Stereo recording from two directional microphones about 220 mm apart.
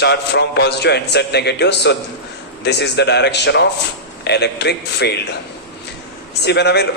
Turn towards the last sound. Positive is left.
turn(degrees=50)  # may be behind; listen again after turning